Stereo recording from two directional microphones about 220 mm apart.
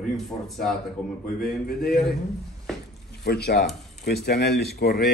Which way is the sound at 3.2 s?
45° left (ahead or behind).